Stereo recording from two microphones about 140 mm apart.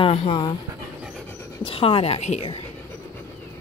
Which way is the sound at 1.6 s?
40° left (ahead or behind).